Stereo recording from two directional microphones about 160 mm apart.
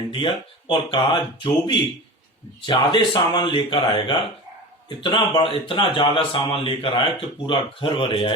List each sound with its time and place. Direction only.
0.1 s speech: 30° left (ahead or behind)